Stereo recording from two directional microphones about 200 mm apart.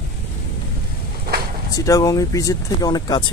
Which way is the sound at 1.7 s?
15° left (ahead or behind).